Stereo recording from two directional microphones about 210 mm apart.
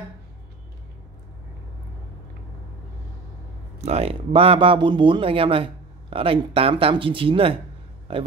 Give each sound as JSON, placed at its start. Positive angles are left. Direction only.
{"t": 3.8, "sound": "speech", "side_deg": -30}